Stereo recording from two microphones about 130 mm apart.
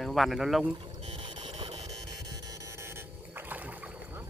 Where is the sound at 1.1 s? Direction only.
45° right (ahead or behind).